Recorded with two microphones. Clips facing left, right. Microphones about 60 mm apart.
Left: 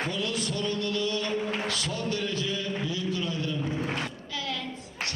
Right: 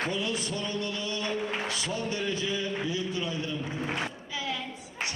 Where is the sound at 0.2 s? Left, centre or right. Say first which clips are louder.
Left 1 dB; right.